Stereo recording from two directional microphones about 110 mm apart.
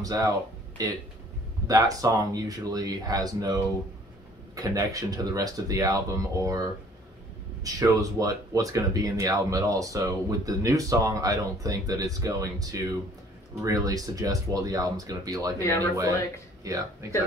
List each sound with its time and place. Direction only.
0.0 s speech: 30° right (ahead or behind)
16.6 s speech: 35° right (ahead or behind)